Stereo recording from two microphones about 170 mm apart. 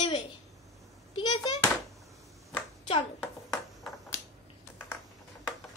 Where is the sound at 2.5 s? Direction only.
30° left (ahead or behind).